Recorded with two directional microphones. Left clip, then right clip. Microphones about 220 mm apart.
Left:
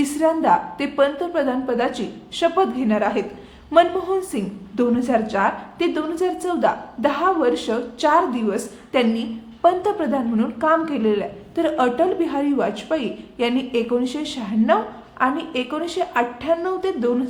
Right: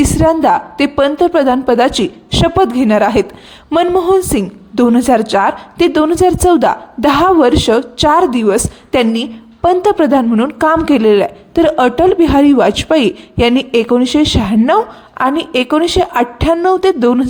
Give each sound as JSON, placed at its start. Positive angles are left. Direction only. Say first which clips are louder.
{"t": 0.0, "sound": "a woman's voice", "louder": "right 8 dB", "side_deg": -45}